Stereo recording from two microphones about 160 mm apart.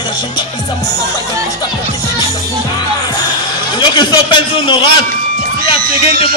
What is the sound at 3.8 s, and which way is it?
A man's voice, 25° left (ahead or behind).